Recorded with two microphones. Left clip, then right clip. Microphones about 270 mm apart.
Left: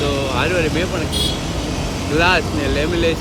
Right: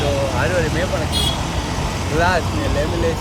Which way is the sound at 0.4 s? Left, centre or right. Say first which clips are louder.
Left 1 dB; centre.